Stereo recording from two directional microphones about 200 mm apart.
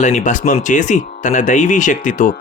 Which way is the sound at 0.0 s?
35° left (ahead or behind).